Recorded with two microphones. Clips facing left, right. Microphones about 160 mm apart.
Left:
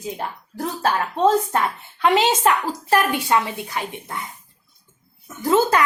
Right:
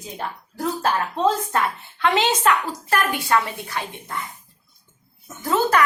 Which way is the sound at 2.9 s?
20° left (ahead or behind).